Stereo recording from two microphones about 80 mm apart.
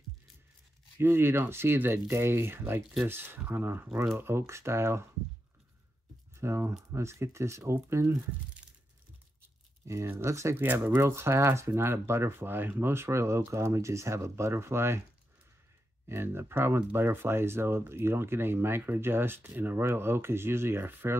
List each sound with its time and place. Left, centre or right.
0.9 s speech: right
6.3 s speech: right
9.8 s speech: right
10.6 s speech: right
11.1 s speech: right
16.1 s speech: right